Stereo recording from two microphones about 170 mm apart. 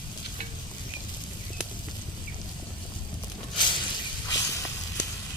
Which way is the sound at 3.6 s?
30° left (ahead or behind).